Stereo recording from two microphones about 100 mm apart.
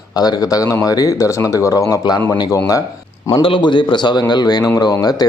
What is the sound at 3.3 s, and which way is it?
A man's voice, 60° left (ahead or behind).